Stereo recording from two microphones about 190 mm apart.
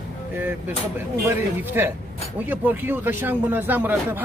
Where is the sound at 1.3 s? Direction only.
10° right (ahead or behind).